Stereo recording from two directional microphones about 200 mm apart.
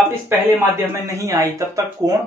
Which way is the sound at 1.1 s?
15° right (ahead or behind).